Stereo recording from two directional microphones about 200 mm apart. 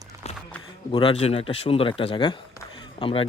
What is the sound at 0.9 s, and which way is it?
Speech, 25° left (ahead or behind).